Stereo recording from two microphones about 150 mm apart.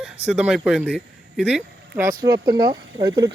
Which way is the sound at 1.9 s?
20° right (ahead or behind).